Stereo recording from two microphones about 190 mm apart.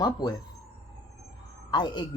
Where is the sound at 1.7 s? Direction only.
20° left (ahead or behind).